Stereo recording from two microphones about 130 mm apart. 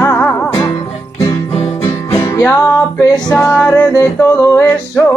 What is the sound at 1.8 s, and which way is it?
Music, 25° left (ahead or behind).